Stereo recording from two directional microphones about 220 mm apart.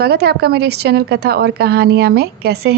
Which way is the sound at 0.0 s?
45° right (ahead or behind).